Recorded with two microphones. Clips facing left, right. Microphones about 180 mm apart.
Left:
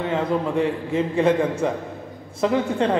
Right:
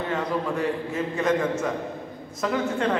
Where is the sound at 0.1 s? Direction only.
25° left (ahead or behind).